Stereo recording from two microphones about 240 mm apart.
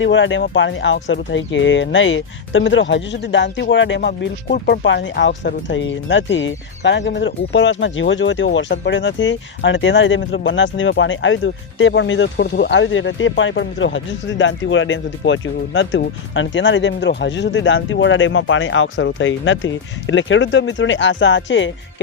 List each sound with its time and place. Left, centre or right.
0.0 s speech: left